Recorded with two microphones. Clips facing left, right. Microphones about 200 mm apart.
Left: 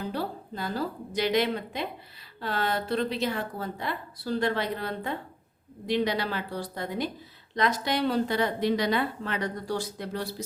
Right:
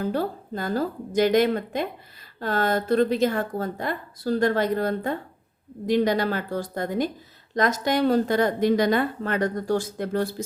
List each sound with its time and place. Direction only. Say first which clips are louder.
0.0 s a woman's voice: right 6 dB; 45° right (ahead or behind)